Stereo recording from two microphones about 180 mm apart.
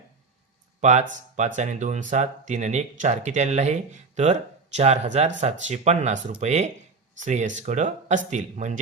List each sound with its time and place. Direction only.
0.8 s speech: 40° right (ahead or behind)